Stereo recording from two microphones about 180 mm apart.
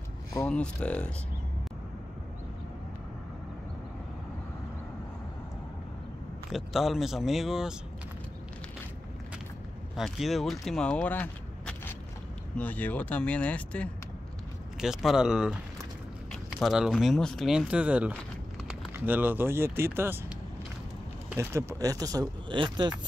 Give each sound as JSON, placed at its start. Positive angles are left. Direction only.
{"t": 0.4, "sound": "speech", "side_deg": 5}
{"t": 6.5, "sound": "speech", "side_deg": 0}
{"t": 9.9, "sound": "speech", "side_deg": 0}